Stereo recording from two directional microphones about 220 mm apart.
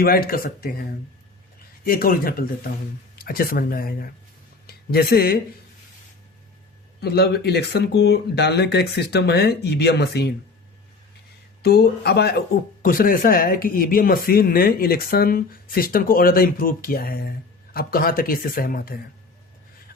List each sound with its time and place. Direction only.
0.0 s speech: 45° left (ahead or behind)
7.0 s speech: 45° left (ahead or behind)
11.6 s speech: 45° left (ahead or behind)